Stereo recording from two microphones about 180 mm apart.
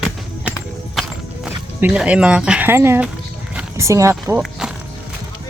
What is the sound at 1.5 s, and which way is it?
Speech, 5° right (ahead or behind).